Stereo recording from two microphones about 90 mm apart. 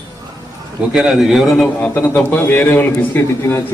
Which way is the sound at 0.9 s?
5° right (ahead or behind).